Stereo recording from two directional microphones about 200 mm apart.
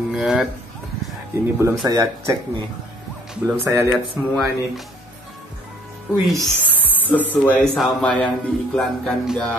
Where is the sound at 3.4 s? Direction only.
10° right (ahead or behind).